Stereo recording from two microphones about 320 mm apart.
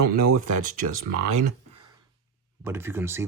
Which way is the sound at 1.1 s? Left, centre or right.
Right.